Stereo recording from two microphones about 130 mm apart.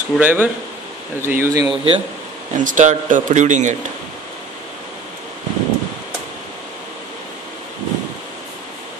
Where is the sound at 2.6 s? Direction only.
75° right (ahead or behind).